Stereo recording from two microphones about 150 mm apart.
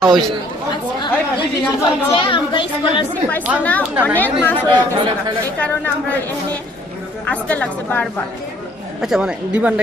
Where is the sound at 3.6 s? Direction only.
10° left (ahead or behind).